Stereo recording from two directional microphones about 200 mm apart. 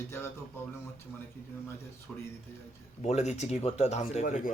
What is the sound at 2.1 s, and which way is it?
Speech, 5° left (ahead or behind).